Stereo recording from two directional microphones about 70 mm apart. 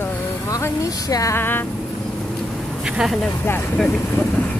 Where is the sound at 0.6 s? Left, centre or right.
Left.